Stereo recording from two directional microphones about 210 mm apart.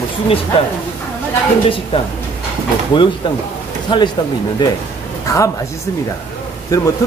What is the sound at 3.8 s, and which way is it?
Speech, 20° left (ahead or behind).